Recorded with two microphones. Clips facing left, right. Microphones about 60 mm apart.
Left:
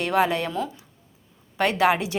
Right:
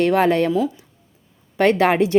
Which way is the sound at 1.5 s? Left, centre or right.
Right.